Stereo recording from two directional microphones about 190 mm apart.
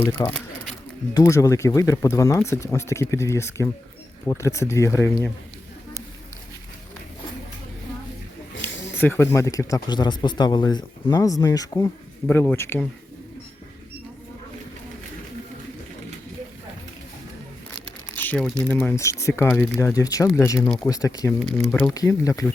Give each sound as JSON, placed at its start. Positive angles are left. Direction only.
{"t": 0.0, "sound": "a sound", "side_deg": 10}
{"t": 1.1, "sound": "speech", "side_deg": 20}
{"t": 8.6, "sound": "speech", "side_deg": 10}
{"t": 18.2, "sound": "speech", "side_deg": 5}
{"t": 19.8, "sound": "speech", "side_deg": 20}
{"t": 21.5, "sound": "speech", "side_deg": 5}